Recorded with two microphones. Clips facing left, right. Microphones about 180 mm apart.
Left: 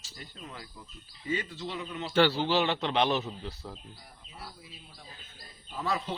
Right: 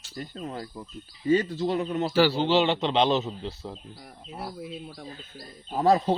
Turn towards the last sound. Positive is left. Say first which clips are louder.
# right 11 dB
turn(degrees=-40)  # may be behind; listen again after turning